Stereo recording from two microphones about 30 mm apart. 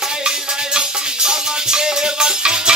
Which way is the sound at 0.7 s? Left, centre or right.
Right.